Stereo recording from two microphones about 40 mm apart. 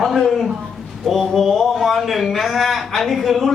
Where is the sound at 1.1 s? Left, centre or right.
Centre.